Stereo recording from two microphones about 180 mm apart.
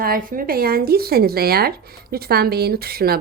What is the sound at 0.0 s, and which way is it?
Speech, 55° right (ahead or behind).